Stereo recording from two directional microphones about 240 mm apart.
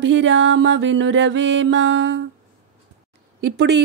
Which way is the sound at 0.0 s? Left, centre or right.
Right.